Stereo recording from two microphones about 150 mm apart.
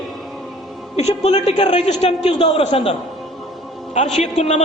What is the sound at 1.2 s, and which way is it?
A man's voice, 45° left (ahead or behind).